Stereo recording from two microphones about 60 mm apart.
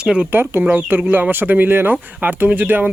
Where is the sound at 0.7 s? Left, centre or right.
Right.